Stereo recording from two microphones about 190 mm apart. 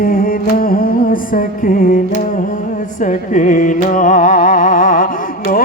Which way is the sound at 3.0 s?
40° left (ahead or behind).